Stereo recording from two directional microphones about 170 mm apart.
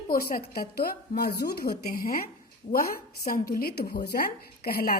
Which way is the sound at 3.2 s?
60° left (ahead or behind).